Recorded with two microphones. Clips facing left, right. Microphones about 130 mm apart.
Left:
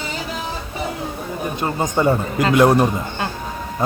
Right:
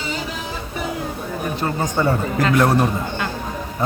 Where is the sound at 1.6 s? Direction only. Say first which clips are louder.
Left 2 dB; 20° left (ahead or behind).